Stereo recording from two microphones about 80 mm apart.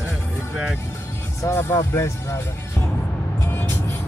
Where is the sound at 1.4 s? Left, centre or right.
Left.